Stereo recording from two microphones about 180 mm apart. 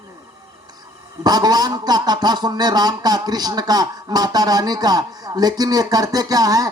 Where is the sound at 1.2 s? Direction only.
20° right (ahead or behind).